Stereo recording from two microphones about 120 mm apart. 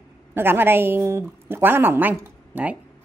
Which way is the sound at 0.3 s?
20° right (ahead or behind).